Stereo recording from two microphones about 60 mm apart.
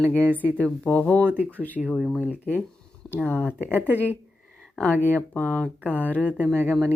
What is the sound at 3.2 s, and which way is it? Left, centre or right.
Speech, left.